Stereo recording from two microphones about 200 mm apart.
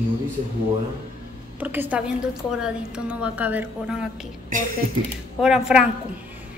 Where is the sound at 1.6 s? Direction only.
10° right (ahead or behind).